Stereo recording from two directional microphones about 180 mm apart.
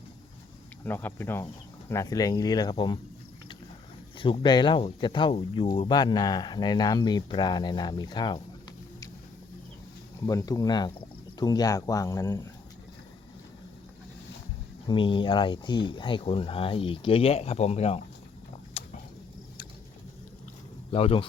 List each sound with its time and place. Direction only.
0.9 s speech: 10° left (ahead or behind)
4.2 s speech: 25° left (ahead or behind)
10.2 s speech: 20° left (ahead or behind)
14.8 s speech: 25° left (ahead or behind)
18.8 s a sound: 35° left (ahead or behind)
20.9 s a man's voice: 30° left (ahead or behind)